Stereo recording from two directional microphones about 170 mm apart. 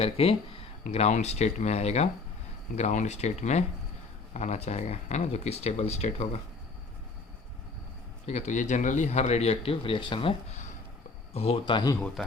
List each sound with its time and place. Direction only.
0.0 s speech: 35° left (ahead or behind)
8.3 s speech: 45° left (ahead or behind); by 11.9 s 25° left (ahead or behind)
11.9 s speech: 5° left (ahead or behind)